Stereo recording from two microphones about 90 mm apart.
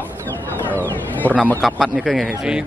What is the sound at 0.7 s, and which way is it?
Speech, 20° left (ahead or behind).